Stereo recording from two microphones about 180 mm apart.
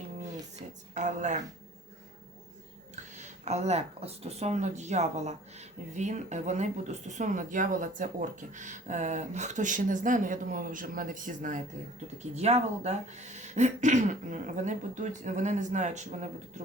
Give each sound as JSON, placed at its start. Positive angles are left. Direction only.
{"t": 0.6, "sound": "a sound", "side_deg": -40}
{"t": 0.9, "sound": "speech", "side_deg": -40}
{"t": 2.9, "sound": "speech", "side_deg": -40}